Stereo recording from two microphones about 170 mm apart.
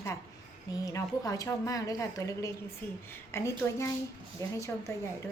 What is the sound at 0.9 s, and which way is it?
A woman's voice, 20° left (ahead or behind).